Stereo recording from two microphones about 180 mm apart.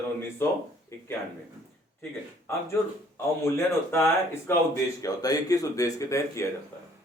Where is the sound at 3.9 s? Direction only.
15° left (ahead or behind).